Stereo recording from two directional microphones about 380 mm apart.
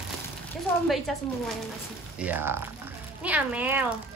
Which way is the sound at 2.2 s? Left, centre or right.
Centre.